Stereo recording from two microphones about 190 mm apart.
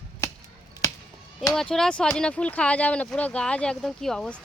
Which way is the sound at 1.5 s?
5° left (ahead or behind).